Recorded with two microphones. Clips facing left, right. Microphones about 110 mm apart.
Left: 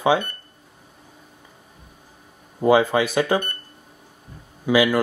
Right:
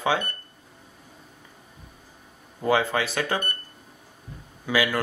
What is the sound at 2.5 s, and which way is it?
Speech, 15° left (ahead or behind).